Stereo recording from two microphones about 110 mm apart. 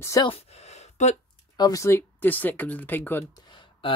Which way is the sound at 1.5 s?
35° left (ahead or behind).